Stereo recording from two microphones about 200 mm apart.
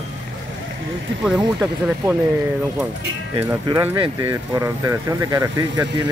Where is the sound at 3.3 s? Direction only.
10° right (ahead or behind).